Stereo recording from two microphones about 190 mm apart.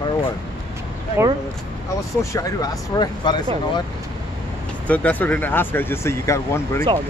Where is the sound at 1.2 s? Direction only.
15° right (ahead or behind).